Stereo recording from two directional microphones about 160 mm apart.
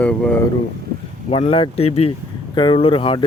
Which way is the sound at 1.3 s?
35° left (ahead or behind).